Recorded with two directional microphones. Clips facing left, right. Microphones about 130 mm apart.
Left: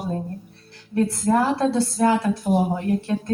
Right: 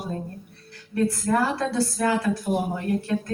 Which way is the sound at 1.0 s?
25° left (ahead or behind).